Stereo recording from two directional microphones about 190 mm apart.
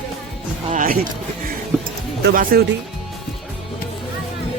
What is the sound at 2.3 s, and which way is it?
Speech, 50° right (ahead or behind).